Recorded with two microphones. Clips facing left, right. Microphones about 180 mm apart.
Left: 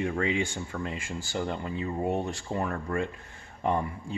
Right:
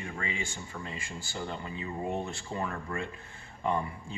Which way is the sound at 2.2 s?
45° left (ahead or behind).